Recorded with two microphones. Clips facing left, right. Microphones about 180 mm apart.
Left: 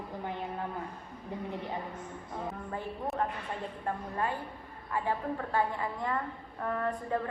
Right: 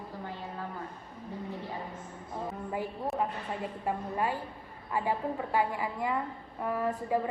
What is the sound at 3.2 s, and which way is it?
A woman's voice, 10° right (ahead or behind).